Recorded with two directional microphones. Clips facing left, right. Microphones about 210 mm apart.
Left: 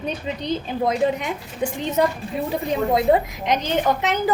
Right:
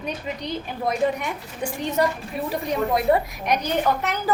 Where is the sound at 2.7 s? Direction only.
25° left (ahead or behind).